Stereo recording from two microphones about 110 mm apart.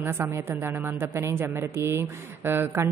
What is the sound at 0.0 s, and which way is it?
A woman's voice, 20° right (ahead or behind).